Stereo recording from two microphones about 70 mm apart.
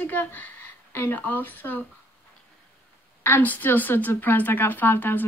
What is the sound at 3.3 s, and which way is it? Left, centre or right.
A woman's voice, left.